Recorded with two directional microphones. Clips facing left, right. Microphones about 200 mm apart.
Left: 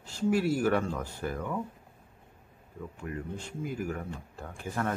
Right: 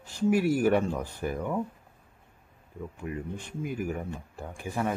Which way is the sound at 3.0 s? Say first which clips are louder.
Right 2 dB; 15° right (ahead or behind).